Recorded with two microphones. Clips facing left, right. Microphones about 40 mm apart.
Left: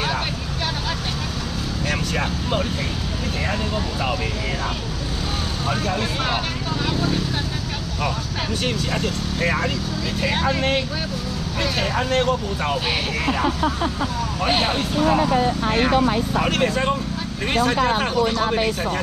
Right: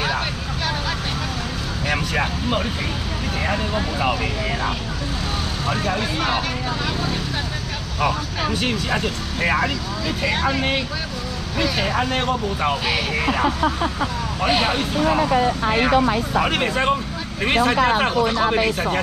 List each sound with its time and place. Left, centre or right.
1.9 s vehicle: centre
3.4 s speech: centre
5.7 s speech: centre
8.0 s speech: centre
10.2 s speech: centre
14.4 s speech: centre